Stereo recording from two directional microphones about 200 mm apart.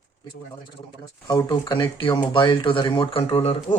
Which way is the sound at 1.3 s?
20° left (ahead or behind).